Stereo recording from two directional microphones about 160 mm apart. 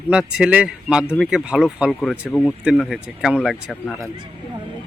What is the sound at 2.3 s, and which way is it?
Speech, 15° left (ahead or behind).